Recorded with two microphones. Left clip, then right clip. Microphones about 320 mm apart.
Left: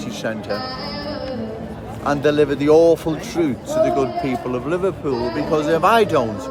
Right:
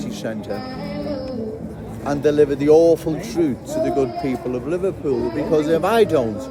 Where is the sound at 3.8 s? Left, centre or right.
Left.